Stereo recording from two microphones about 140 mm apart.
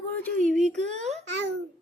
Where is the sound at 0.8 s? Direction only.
55° right (ahead or behind).